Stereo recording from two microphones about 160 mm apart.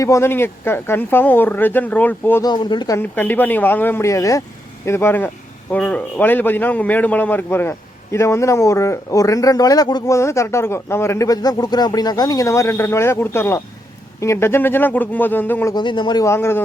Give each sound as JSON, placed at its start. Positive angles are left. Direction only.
{"t": 0.0, "sound": "a man's voice", "side_deg": 15}
{"t": 2.4, "sound": "speech", "side_deg": 25}
{"t": 3.0, "sound": "a man's voice", "side_deg": 10}
{"t": 15.7, "sound": "speech", "side_deg": 30}